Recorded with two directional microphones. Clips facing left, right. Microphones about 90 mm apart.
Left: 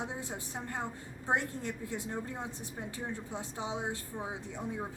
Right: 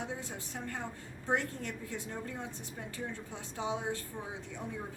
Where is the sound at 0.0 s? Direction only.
20° left (ahead or behind).